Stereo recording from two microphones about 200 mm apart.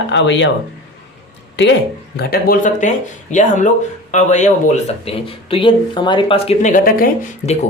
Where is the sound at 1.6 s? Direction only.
60° left (ahead or behind).